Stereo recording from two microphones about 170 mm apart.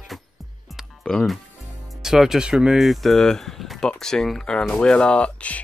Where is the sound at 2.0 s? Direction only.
Centre (ahead or behind).